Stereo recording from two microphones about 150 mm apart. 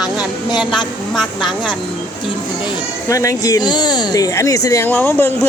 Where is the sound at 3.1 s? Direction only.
20° left (ahead or behind).